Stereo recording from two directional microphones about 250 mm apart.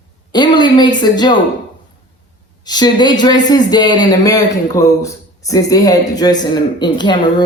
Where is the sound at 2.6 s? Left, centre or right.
Centre.